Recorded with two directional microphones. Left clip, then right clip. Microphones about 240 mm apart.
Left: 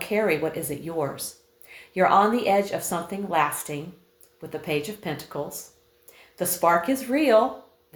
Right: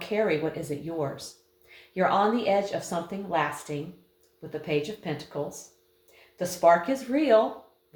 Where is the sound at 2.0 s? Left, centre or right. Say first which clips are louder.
Left 5 dB; left.